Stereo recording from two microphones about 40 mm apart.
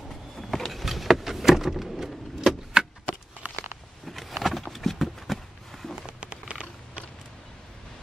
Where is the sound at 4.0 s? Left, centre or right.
Centre.